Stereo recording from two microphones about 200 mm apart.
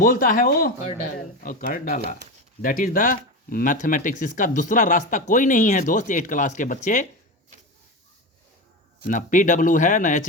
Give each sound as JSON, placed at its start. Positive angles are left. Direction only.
{"t": 0.0, "sound": "speech", "side_deg": 45}
{"t": 9.0, "sound": "speech", "side_deg": 40}